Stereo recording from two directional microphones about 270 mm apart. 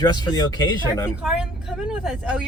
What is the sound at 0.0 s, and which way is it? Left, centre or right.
Speech, centre.